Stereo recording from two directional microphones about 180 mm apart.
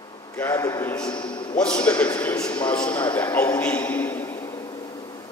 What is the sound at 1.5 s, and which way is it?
A man's voice, 5° left (ahead or behind).